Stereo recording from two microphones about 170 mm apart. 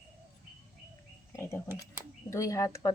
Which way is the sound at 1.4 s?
15° left (ahead or behind).